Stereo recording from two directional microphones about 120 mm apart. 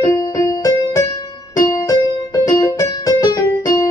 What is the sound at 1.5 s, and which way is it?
Music, 25° left (ahead or behind).